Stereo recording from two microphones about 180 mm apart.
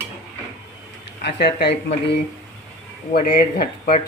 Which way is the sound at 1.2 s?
65° left (ahead or behind).